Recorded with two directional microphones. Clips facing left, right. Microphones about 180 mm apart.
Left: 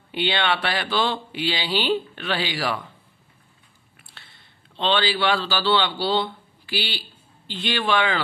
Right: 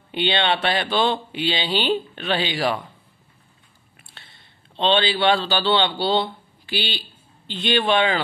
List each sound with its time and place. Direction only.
0.1 s speech: 25° right (ahead or behind)
3.9 s a man's voice: 20° right (ahead or behind)